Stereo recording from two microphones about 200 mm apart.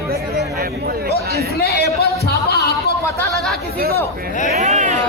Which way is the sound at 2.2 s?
50° left (ahead or behind).